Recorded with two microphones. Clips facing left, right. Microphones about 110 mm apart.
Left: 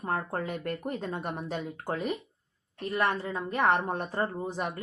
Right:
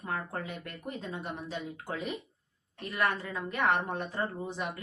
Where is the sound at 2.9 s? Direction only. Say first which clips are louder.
Left 3 dB; 30° left (ahead or behind).